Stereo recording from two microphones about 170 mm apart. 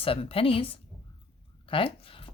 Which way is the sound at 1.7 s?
30° left (ahead or behind).